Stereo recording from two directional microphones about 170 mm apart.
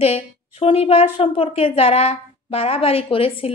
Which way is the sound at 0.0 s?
35° left (ahead or behind).